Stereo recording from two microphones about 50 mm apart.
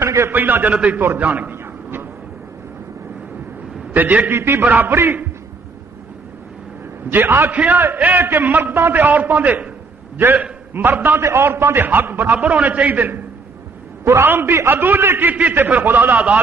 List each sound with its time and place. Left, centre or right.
0.0 s a sound: right
0.3 s a man's voice: right
0.7 s a man's voice: right
1.5 s a sound: right
3.9 s a man's voice: right
4.3 s a man's voice: right
4.6 s a man's voice: right
7.1 s a man's voice: right
7.5 s a man's voice: right
11.2 s a man's voice: right
14.0 s a man's voice: right